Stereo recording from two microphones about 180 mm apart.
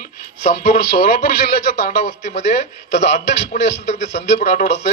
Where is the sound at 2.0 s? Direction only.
40° left (ahead or behind).